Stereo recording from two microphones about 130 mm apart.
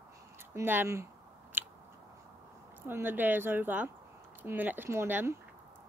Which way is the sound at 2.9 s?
15° right (ahead or behind).